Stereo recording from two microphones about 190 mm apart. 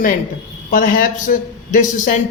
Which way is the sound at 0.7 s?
45° left (ahead or behind).